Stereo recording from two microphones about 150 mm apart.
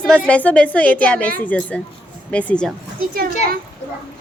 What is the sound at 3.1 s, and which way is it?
Speech, 75° right (ahead or behind).